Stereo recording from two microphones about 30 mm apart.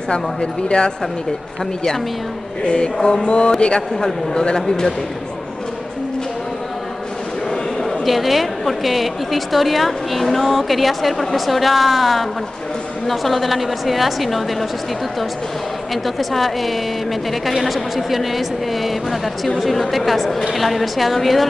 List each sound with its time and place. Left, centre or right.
0.1 s speech: left
2.6 s speech: left
8.0 s a woman's voice: centre
15.9 s a woman's voice: centre